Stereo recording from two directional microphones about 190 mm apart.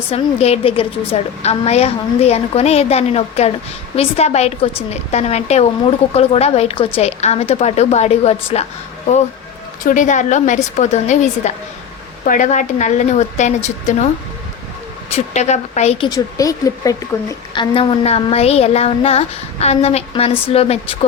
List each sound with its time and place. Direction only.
0.1 s a woman's voice: 30° left (ahead or behind)
9.8 s a woman's voice: 40° left (ahead or behind)
15.1 s a woman's voice: 35° left (ahead or behind)
16.0 s a woman's voice: 20° left (ahead or behind)